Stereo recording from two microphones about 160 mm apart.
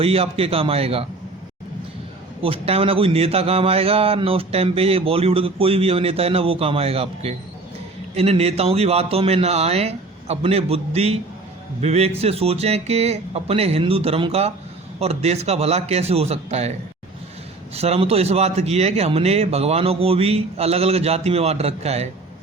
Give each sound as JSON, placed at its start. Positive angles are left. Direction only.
{"t": 0.0, "sound": "a man's voice", "side_deg": -35}
{"t": 2.4, "sound": "a man's voice", "side_deg": -35}
{"t": 17.7, "sound": "a man's voice", "side_deg": -40}